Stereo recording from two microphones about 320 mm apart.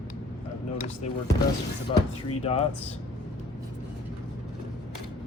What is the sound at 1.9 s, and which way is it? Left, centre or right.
Speech, centre.